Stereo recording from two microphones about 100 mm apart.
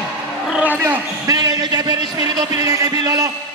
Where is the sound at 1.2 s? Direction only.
40° right (ahead or behind).